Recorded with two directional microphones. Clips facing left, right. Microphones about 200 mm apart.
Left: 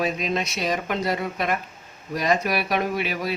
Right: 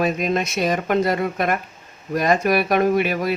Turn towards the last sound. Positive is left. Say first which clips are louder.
# right 7 dB
turn(degrees=-50)  # may be behind; listen again after turning